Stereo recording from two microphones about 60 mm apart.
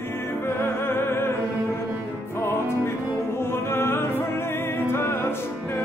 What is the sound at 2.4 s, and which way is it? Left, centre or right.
Music, left.